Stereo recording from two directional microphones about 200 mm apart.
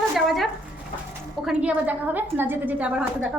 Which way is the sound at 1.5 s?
5° right (ahead or behind).